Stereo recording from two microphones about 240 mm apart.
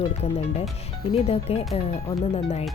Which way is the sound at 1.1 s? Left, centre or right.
Left.